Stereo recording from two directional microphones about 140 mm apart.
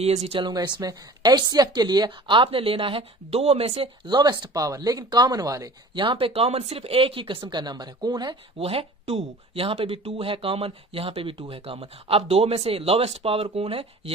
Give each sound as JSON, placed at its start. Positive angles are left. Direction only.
{"t": 0.0, "sound": "speech", "side_deg": -50}